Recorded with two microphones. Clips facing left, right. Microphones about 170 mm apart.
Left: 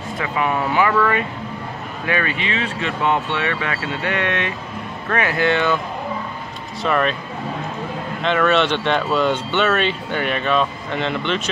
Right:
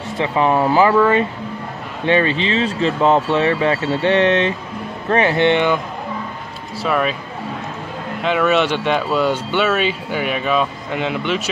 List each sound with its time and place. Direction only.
0.2 s speech: 30° right (ahead or behind)
6.8 s speech: 5° right (ahead or behind)
8.2 s speech: 10° right (ahead or behind)